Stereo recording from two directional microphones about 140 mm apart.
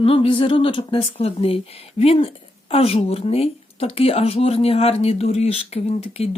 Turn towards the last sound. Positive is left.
turn(degrees=45)  # may be behind; listen again after turning